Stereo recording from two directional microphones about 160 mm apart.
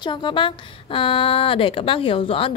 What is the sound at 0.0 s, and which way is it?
Speech, 30° left (ahead or behind).